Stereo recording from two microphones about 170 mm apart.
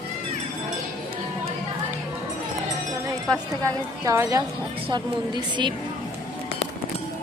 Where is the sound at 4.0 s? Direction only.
20° right (ahead or behind).